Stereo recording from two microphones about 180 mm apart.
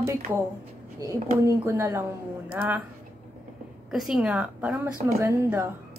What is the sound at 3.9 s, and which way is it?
A woman's voice, centre (ahead or behind).